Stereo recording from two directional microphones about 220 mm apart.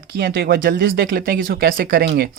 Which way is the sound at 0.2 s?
40° right (ahead or behind).